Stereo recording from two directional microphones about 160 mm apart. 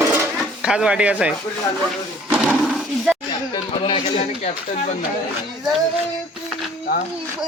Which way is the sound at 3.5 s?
30° left (ahead or behind).